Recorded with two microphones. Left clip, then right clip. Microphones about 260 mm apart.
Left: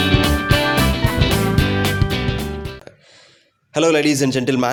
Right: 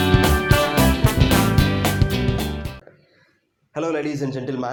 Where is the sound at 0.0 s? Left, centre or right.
Centre.